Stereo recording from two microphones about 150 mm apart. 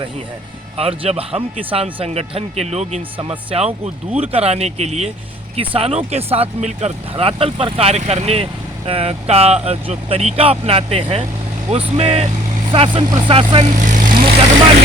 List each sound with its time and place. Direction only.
0.8 s a man's voice: 40° right (ahead or behind)
13.7 s vehicle: 55° right (ahead or behind)